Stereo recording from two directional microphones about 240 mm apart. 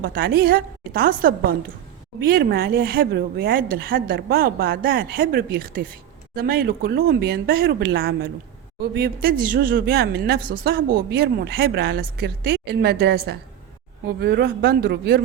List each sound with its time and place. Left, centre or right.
0.0 s a woman's voice: right